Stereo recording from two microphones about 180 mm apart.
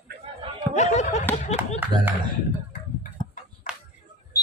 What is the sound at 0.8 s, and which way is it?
Speech, 40° left (ahead or behind).